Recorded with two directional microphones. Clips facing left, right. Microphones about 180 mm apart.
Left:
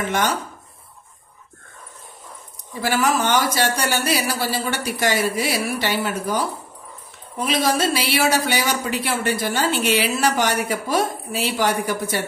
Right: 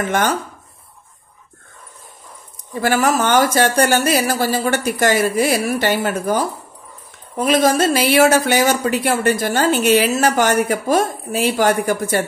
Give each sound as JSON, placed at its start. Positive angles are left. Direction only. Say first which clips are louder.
{"t": 0.0, "sound": "speech", "louder": "right 3 dB", "side_deg": -50}
{"t": 2.7, "sound": "speech", "louder": "right 4 dB", "side_deg": -50}